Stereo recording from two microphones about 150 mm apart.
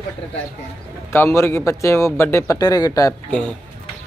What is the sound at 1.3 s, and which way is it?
Speech, 20° left (ahead or behind).